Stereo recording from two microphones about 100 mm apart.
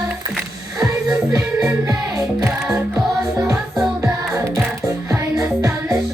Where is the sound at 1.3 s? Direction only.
25° right (ahead or behind).